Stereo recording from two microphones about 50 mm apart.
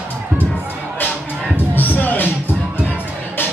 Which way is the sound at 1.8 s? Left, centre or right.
Left.